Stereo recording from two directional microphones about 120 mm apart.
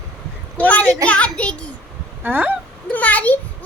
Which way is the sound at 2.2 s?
15° right (ahead or behind).